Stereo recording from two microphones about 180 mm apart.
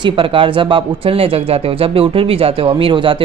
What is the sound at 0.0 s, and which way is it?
A woman's voice, 30° right (ahead or behind).